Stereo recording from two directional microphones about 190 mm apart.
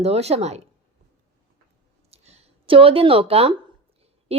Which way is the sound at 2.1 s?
35° right (ahead or behind).